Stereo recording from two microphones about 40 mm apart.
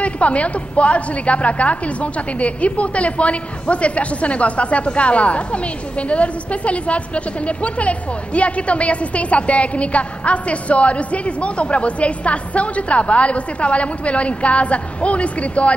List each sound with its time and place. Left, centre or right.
0.0 s a woman's voice: left